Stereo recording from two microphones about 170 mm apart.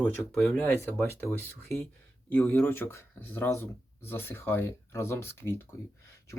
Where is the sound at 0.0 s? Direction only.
Centre (ahead or behind).